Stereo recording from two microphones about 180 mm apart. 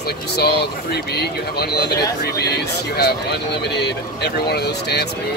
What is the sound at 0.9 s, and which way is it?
Speech, 65° left (ahead or behind).